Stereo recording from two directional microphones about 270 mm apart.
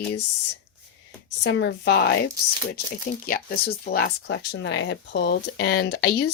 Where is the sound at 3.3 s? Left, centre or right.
Left.